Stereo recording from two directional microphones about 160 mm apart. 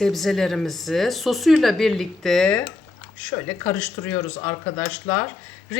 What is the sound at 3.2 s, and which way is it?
Speech, 15° left (ahead or behind).